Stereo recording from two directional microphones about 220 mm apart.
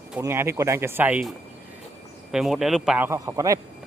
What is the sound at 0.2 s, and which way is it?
Speech, 10° right (ahead or behind).